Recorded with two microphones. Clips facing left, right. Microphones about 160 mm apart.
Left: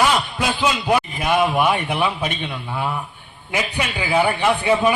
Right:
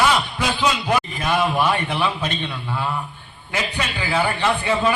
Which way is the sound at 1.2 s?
15° left (ahead or behind).